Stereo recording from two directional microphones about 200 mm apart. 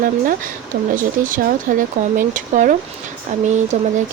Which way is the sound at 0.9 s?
45° right (ahead or behind).